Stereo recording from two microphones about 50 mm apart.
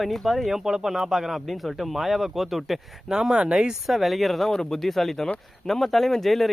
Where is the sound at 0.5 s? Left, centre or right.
Centre.